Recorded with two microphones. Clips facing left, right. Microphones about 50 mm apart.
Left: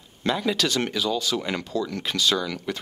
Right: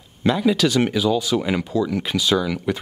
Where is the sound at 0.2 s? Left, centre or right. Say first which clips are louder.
Right 6 dB; centre.